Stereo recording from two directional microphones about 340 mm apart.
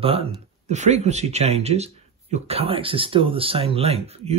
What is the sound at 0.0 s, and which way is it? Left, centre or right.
Speech, centre.